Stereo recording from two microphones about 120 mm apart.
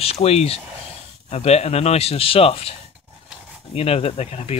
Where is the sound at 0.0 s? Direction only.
60° left (ahead or behind).